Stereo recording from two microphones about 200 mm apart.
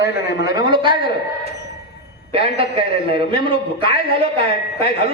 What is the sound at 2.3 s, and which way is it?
A man's voice, 30° right (ahead or behind).